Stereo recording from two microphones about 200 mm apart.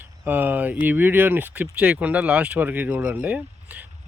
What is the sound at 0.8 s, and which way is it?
Speech, 10° right (ahead or behind).